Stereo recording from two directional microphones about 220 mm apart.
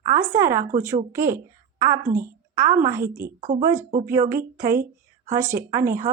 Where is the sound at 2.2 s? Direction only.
15° right (ahead or behind).